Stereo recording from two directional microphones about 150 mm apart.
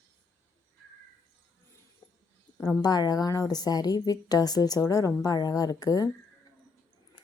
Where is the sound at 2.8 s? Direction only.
25° left (ahead or behind).